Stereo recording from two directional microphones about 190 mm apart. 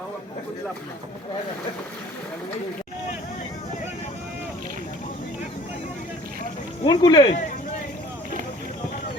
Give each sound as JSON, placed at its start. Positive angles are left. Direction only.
{"t": 6.8, "sound": "speech", "side_deg": 20}